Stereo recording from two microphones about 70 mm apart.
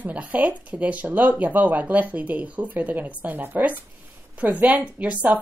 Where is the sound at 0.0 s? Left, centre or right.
Right.